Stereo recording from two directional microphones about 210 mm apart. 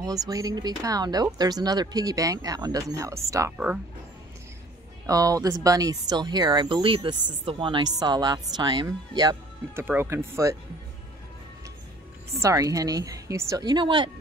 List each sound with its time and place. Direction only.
0.0 s speech: 15° right (ahead or behind)
5.0 s speech: 15° right (ahead or behind)
12.3 s speech: 15° right (ahead or behind)